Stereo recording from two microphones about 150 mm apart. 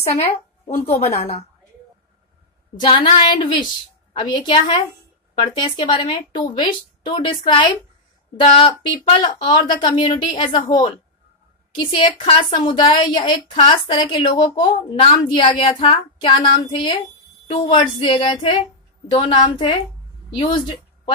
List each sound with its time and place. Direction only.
0.1 s a woman's voice: 45° left (ahead or behind)
2.8 s a woman's voice: 35° left (ahead or behind)